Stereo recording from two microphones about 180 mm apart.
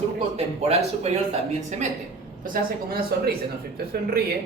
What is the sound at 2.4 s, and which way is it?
Speech, 55° right (ahead or behind).